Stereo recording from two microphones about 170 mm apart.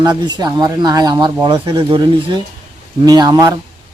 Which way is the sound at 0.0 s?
25° right (ahead or behind).